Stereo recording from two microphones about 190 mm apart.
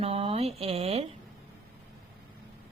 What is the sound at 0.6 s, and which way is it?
Speech, 30° right (ahead or behind).